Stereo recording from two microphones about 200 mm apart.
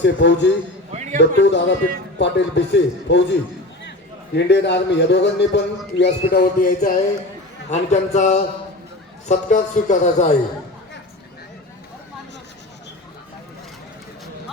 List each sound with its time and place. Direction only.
0.0 s a man's voice: 60° left (ahead or behind)
0.9 s a sound: 35° right (ahead or behind)
1.2 s a man's voice: 60° left (ahead or behind)
4.4 s a man's voice: 60° left (ahead or behind); by 10.3 s 35° left (ahead or behind)